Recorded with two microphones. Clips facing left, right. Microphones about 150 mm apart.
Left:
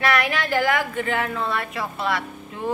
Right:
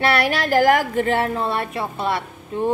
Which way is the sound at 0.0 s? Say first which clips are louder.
Right 3 dB; 35° right (ahead or behind).